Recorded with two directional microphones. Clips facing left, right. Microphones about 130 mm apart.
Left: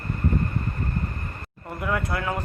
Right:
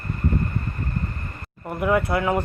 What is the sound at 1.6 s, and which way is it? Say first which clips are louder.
Speech: right 6 dB; 20° right (ahead or behind).